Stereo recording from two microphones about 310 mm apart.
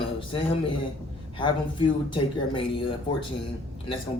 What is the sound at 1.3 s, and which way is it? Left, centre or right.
Speech, centre.